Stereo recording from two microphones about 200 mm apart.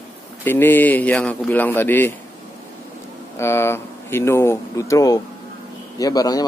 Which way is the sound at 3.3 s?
10° left (ahead or behind).